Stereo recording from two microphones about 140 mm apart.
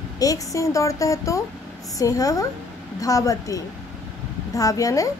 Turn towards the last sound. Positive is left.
turn(degrees=25)  # may be behind; listen again after turning